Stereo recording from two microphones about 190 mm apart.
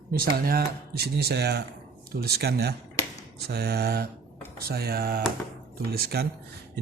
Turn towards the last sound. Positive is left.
turn(degrees=-55)  # may be behind; listen again after turning